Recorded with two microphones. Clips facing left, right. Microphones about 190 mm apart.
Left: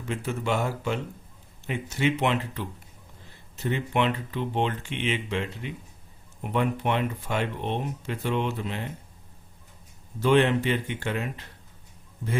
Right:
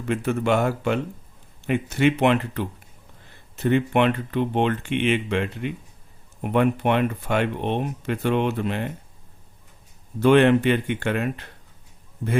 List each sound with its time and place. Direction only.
0.1 s speech: 60° right (ahead or behind)
10.2 s speech: 60° right (ahead or behind)